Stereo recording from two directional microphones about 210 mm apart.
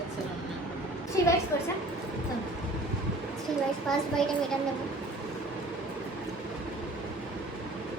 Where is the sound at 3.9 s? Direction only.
Centre (ahead or behind).